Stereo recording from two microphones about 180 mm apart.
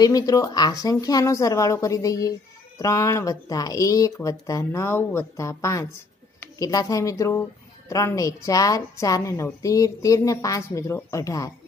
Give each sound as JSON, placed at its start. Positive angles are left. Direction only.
{"t": 0.0, "sound": "a woman's voice", "side_deg": 20}